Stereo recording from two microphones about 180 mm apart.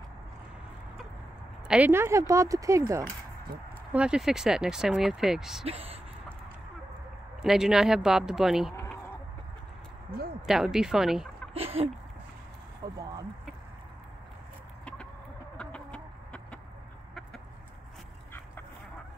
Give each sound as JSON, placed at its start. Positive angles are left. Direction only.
{"t": 1.7, "sound": "speech", "side_deg": -10}
{"t": 3.9, "sound": "speech", "side_deg": -5}
{"t": 5.7, "sound": "speech", "side_deg": -35}
{"t": 7.4, "sound": "speech", "side_deg": -5}
{"t": 10.4, "sound": "speech", "side_deg": -5}
{"t": 11.5, "sound": "a sound", "side_deg": -35}
{"t": 12.8, "sound": "speech", "side_deg": -25}
{"t": 15.5, "sound": "chicken", "side_deg": 5}